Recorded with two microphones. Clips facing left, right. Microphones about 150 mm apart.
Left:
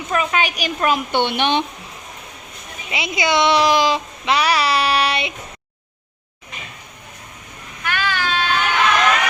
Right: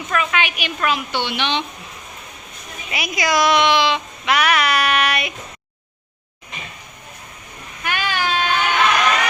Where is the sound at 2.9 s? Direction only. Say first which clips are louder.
Left 1 dB; 25° left (ahead or behind).